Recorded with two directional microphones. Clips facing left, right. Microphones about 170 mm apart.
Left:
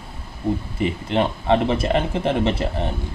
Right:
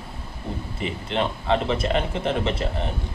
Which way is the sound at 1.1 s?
30° left (ahead or behind).